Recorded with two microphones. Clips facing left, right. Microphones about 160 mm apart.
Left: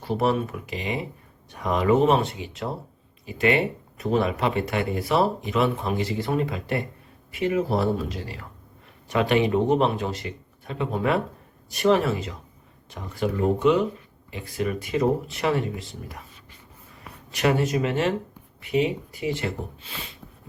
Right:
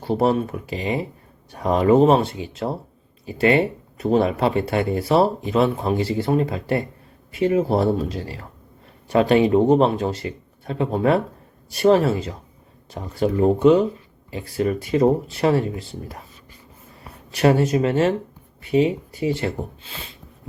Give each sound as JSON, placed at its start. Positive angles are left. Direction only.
{"t": 0.0, "sound": "speech", "side_deg": -30}